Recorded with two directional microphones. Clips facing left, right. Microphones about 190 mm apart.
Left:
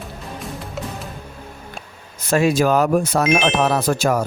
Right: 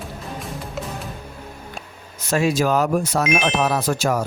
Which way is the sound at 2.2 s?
55° left (ahead or behind).